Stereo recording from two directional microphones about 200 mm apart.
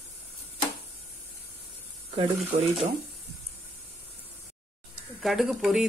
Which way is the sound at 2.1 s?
30° right (ahead or behind).